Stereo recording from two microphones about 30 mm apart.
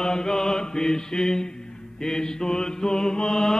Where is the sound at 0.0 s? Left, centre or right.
Left.